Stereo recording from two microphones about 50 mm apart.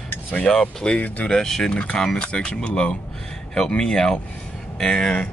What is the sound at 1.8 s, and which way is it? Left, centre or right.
Speech, left.